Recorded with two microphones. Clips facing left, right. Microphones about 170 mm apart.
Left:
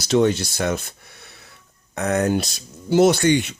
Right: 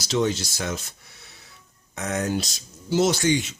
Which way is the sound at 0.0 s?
55° left (ahead or behind).